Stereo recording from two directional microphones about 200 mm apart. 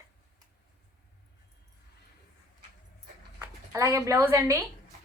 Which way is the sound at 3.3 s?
15° right (ahead or behind).